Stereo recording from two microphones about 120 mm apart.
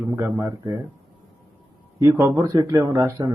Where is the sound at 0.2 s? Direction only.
15° right (ahead or behind).